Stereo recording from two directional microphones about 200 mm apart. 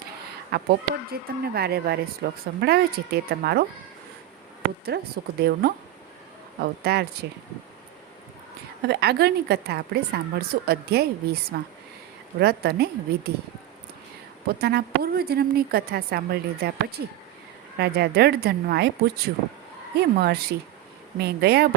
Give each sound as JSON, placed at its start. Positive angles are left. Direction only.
{"t": 0.5, "sound": "speech", "side_deg": -50}
{"t": 4.9, "sound": "speech", "side_deg": -55}
{"t": 8.9, "sound": "speech", "side_deg": -55}
{"t": 14.6, "sound": "speech", "side_deg": -50}